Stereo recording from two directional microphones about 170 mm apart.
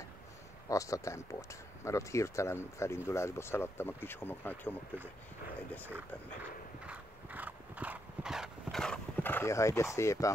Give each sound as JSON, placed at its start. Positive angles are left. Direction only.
{"t": 0.7, "sound": "speech", "side_deg": 20}
{"t": 6.9, "sound": "horse", "side_deg": -10}